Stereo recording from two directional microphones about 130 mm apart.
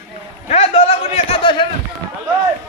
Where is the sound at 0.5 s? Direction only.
50° left (ahead or behind).